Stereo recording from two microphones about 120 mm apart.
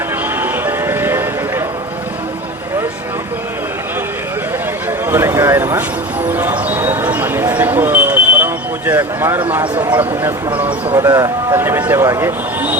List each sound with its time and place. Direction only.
0.3 s music: 15° right (ahead or behind)
5.1 s speech: 20° right (ahead or behind)
6.2 s a sound: 15° right (ahead or behind)
8.9 s speech: 20° right (ahead or behind)
9.7 s speech: 40° right (ahead or behind)
11.5 s speech: 20° right (ahead or behind)